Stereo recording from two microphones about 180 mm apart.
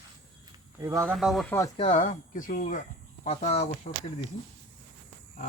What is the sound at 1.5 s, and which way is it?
Speech, 15° left (ahead or behind).